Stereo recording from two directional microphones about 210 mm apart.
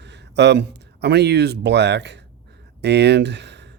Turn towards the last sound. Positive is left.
turn(degrees=-55)  # may be behind; listen again after turning